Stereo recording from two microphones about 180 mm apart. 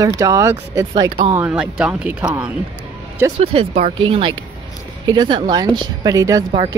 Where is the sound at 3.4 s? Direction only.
35° right (ahead or behind).